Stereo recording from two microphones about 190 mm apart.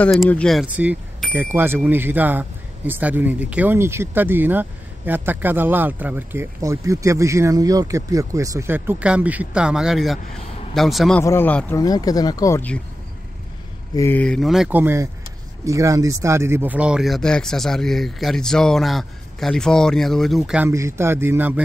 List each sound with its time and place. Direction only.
0.0 s speech: 5° left (ahead or behind)
13.9 s speech: 10° left (ahead or behind); by 21.5 s 10° right (ahead or behind)